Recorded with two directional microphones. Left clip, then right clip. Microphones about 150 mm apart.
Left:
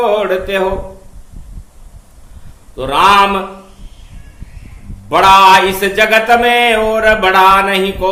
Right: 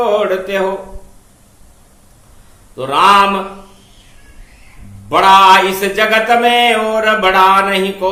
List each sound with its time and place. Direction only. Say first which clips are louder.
0.0 s mantra: left 1 dB; 15° left (ahead or behind)
2.7 s mantra: even; 15° left (ahead or behind)
5.0 s mantra: left 1 dB; 20° left (ahead or behind)